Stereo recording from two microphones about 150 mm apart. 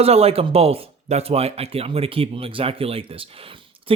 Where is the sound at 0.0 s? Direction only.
40° right (ahead or behind).